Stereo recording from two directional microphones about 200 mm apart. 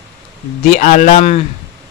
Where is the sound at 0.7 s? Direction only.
40° left (ahead or behind).